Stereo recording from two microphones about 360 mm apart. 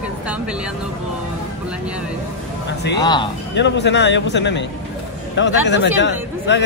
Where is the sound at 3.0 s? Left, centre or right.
Centre.